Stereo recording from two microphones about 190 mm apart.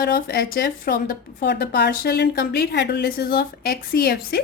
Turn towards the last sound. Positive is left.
turn(degrees=55)  # may be behind; listen again after turning